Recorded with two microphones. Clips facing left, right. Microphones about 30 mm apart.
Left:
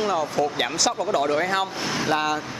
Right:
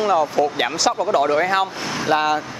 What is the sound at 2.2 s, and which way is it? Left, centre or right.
Speech, centre.